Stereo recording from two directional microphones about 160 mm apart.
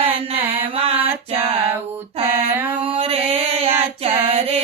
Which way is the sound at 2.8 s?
35° right (ahead or behind).